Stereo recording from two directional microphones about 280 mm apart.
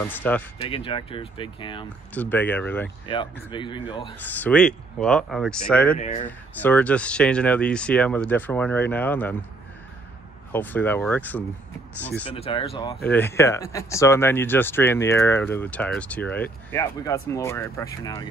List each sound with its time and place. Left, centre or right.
0.0 s speech: centre
0.6 s speech: centre
2.1 s speech: centre
3.5 s speech: centre
4.3 s speech: centre
5.9 s speech: left
6.2 s speech: centre
10.5 s speech: centre
12.4 s speech: centre
13.0 s speech: centre